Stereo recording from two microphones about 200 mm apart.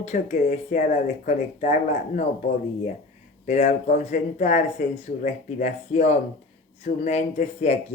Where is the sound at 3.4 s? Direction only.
35° left (ahead or behind).